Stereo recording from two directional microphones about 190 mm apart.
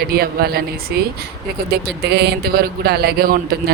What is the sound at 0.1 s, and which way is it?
Speech, 55° right (ahead or behind).